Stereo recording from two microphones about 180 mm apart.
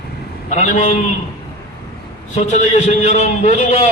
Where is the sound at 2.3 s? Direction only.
40° left (ahead or behind).